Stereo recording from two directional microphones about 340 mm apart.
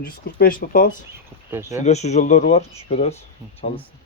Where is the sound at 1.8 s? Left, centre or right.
Centre.